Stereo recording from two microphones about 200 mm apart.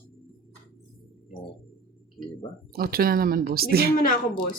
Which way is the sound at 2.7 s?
50° right (ahead or behind).